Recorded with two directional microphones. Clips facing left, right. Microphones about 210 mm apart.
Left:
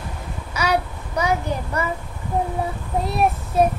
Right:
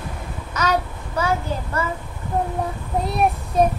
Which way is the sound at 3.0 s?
Centre (ahead or behind).